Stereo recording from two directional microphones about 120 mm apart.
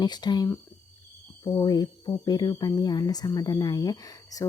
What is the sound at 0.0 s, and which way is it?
Speech, 35° left (ahead or behind).